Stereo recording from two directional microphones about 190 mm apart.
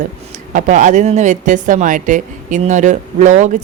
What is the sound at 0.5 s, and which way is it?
A woman's voice, 40° right (ahead or behind).